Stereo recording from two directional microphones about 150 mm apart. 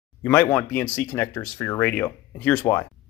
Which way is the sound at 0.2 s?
10° left (ahead or behind).